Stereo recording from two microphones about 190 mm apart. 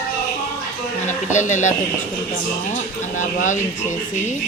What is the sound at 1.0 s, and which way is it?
Speech, 40° left (ahead or behind).